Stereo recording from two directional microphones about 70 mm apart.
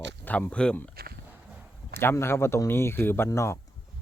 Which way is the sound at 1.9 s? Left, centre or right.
Left.